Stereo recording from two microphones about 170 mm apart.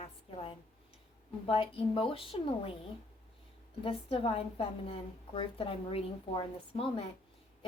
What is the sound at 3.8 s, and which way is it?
A woman's voice, 35° left (ahead or behind).